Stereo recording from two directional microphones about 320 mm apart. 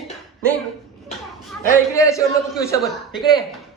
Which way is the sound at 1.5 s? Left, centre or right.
Centre.